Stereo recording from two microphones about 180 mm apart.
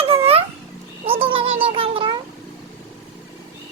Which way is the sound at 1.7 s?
30° right (ahead or behind).